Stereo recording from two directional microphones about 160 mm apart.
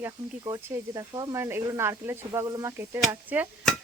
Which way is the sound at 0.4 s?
20° right (ahead or behind).